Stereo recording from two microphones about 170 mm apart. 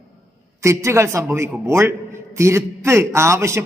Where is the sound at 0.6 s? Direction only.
15° right (ahead or behind).